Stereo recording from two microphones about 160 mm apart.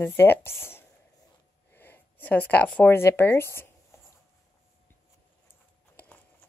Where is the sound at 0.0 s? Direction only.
15° left (ahead or behind).